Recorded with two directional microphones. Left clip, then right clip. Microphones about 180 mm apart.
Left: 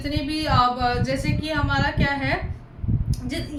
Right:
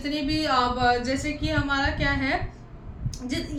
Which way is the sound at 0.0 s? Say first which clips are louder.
Even; 5° right (ahead or behind).